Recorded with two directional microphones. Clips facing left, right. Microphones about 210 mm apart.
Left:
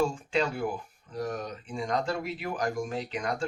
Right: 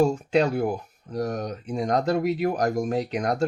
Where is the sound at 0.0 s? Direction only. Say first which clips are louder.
Right 7 dB; 40° right (ahead or behind).